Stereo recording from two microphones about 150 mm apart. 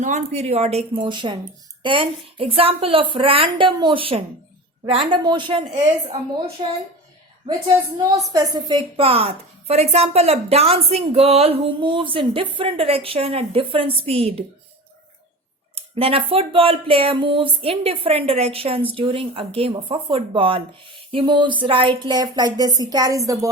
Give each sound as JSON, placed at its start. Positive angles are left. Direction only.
{"t": 0.0, "sound": "speech", "side_deg": -50}
{"t": 8.1, "sound": "a woman's voice", "side_deg": -25}
{"t": 9.0, "sound": "speech", "side_deg": -40}
{"t": 15.7, "sound": "speech", "side_deg": -40}